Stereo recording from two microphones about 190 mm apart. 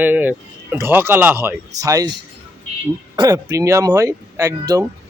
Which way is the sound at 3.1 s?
20° right (ahead or behind).